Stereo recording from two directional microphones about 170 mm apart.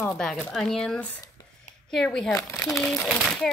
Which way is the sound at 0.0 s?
5° left (ahead or behind).